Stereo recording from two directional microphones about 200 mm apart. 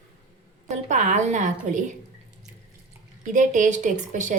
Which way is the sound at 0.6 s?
35° right (ahead or behind).